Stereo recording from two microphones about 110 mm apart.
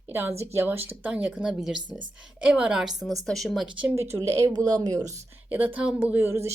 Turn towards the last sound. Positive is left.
turn(degrees=-25)  # may be behind; listen again after turning